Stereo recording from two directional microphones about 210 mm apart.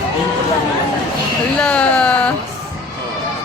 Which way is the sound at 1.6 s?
5° left (ahead or behind).